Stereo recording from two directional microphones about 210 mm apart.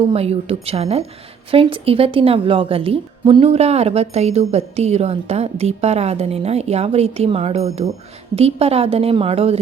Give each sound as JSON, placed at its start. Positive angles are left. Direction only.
{"t": 0.0, "sound": "a woman's voice", "side_deg": -30}